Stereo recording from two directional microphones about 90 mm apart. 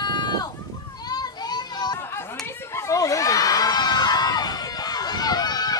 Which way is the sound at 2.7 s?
35° left (ahead or behind).